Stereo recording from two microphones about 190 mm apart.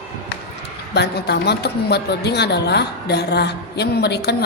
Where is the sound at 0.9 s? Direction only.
60° left (ahead or behind).